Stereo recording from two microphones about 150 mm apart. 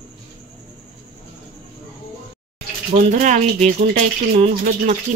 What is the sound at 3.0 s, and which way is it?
Speech, 55° right (ahead or behind).